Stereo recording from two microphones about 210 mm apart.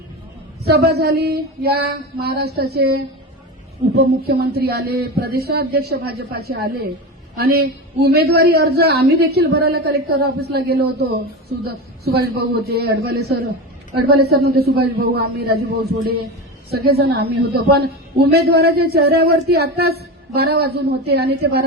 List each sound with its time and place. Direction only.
0.6 s a man's voice: 50° right (ahead or behind)